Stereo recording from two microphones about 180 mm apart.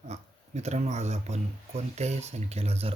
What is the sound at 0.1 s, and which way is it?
Speech, 40° right (ahead or behind).